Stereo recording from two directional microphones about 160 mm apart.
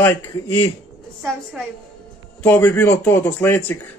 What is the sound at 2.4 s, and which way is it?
Speech, 10° left (ahead or behind).